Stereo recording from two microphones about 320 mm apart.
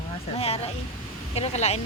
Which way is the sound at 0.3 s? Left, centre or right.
Centre.